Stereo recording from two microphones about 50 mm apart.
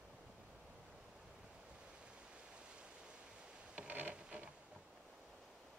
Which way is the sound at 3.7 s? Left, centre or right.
Right.